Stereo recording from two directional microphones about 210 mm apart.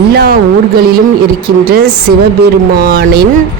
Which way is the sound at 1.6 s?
45° right (ahead or behind).